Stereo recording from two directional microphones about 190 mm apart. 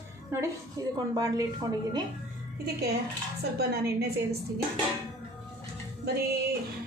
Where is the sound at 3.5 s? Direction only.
55° right (ahead or behind).